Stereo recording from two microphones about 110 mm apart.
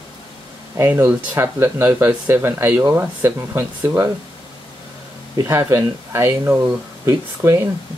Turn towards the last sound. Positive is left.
turn(degrees=-25)  # may be behind; listen again after turning